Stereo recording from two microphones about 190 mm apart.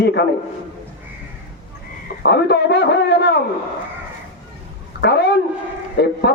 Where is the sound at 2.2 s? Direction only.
60° left (ahead or behind).